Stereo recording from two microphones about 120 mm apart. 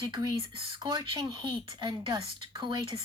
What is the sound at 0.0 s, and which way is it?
A woman's voice, 35° right (ahead or behind).